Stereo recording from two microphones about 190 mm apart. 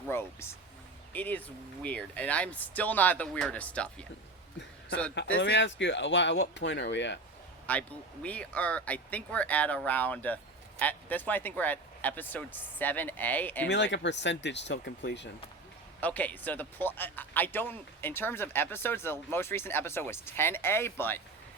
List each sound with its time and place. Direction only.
0.1 s speech: 10° left (ahead or behind)
5.4 s speech: 70° left (ahead or behind)
7.7 s speech: 10° left (ahead or behind)
13.7 s speech: 70° left (ahead or behind)
16.0 s speech: 10° left (ahead or behind)